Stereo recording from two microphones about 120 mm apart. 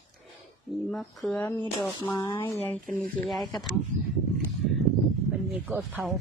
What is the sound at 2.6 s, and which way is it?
Speech, 15° left (ahead or behind).